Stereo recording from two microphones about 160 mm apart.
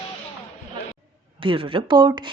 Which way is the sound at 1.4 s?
30° right (ahead or behind).